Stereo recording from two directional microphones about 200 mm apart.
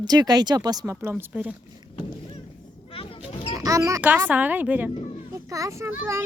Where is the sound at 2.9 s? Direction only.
25° left (ahead or behind).